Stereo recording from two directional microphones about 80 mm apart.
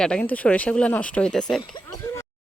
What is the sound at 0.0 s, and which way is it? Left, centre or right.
Speech, centre.